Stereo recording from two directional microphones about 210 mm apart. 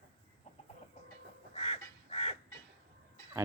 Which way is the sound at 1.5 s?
30° left (ahead or behind).